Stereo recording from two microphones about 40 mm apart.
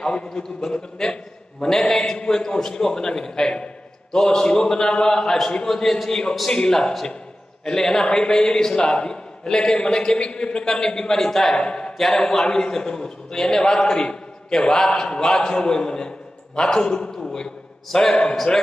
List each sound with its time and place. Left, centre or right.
0.0 s a man's voice: left
0.3 s a man's voice: centre
11.5 s a man's voice: left
17.1 s a sound: centre
17.8 s a man's voice: centre